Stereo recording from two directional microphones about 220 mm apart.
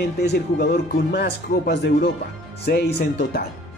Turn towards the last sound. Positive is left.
turn(degrees=45)  # may be behind; listen again after turning